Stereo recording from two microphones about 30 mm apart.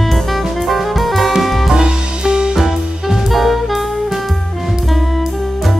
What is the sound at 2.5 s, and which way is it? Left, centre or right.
Music, centre.